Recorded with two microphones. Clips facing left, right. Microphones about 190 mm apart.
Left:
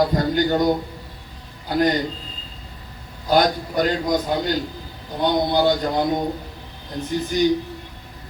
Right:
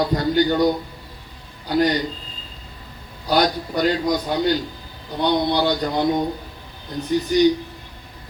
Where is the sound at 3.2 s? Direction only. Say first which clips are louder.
Left 1 dB; 45° left (ahead or behind).